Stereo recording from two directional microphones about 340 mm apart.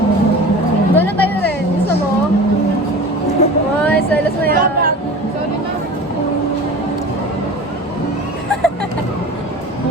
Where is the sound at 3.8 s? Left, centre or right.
Centre.